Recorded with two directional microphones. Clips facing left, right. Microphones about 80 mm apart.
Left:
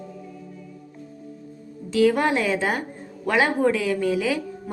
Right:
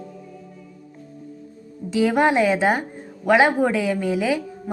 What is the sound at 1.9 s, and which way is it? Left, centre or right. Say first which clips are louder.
A woman's voice: right 1 dB; centre.